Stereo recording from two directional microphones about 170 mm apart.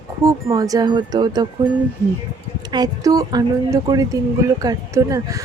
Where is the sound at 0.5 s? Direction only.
20° right (ahead or behind).